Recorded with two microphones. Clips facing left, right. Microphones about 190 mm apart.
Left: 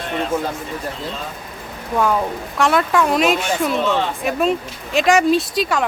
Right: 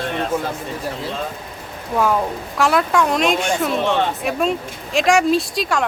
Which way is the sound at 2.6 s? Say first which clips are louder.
Even; centre (ahead or behind).